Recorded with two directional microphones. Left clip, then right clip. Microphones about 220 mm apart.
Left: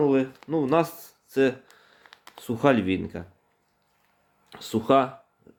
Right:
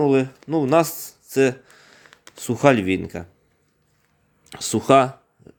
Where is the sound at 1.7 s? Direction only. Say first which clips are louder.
Right 6 dB; 40° right (ahead or behind).